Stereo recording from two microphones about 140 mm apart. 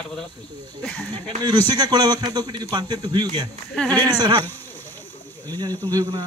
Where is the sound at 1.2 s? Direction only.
30° right (ahead or behind).